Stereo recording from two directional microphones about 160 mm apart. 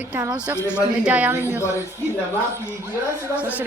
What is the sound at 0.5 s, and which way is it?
Speech, 15° left (ahead or behind).